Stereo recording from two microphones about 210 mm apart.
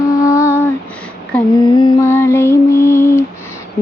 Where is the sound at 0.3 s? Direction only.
15° left (ahead or behind).